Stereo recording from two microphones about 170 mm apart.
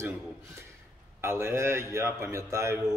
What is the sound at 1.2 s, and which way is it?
Speech, 15° right (ahead or behind).